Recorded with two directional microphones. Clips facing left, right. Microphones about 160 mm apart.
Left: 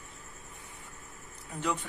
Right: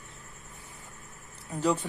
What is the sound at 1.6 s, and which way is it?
Speech, 35° right (ahead or behind).